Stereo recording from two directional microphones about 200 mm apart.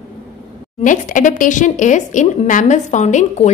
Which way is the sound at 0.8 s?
40° left (ahead or behind).